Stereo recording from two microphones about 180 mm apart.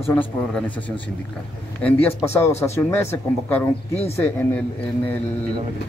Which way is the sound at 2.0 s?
15° left (ahead or behind).